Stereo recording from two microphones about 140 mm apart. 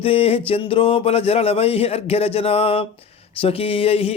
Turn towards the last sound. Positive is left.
turn(degrees=45)  # may be behind; listen again after turning